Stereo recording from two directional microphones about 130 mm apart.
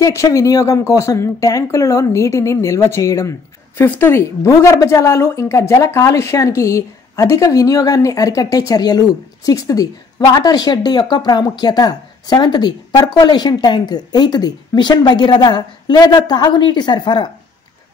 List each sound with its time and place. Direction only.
0.0 s speech: 25° left (ahead or behind)